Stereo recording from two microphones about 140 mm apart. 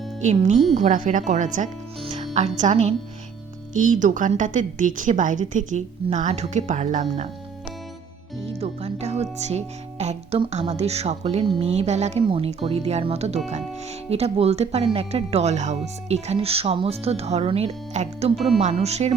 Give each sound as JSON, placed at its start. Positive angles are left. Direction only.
{"t": 0.2, "sound": "a woman's voice", "side_deg": -60}
{"t": 2.0, "sound": "speech", "side_deg": -50}
{"t": 3.8, "sound": "a woman's voice", "side_deg": -65}
{"t": 8.4, "sound": "speech", "side_deg": -45}
{"t": 12.2, "sound": "speech", "side_deg": -40}